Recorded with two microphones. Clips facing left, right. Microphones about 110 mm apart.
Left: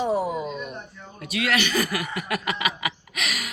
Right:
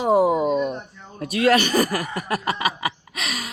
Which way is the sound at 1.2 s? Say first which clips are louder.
Right 7 dB; 40° right (ahead or behind).